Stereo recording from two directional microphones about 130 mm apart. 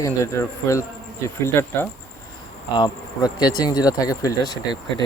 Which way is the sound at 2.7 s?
30° left (ahead or behind).